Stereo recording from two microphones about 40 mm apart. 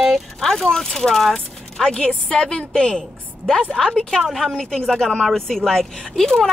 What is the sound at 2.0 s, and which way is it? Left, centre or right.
A woman's voice, left.